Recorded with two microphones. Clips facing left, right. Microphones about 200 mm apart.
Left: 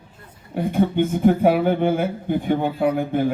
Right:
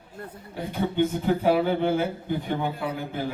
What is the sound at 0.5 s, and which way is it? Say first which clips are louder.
Speech: left 6 dB; 55° left (ahead or behind).